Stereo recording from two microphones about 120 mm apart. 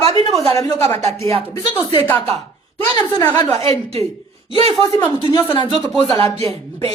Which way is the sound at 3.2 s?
15° left (ahead or behind).